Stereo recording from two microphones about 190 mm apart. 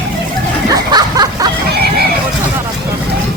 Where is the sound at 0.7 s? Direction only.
20° right (ahead or behind).